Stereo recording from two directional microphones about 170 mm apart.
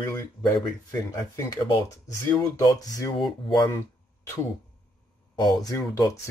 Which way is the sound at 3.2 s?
Centre (ahead or behind).